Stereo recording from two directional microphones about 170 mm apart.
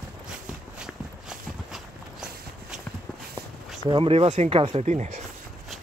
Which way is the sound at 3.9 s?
30° right (ahead or behind).